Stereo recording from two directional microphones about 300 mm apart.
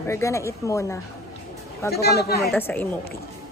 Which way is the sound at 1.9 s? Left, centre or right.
Left.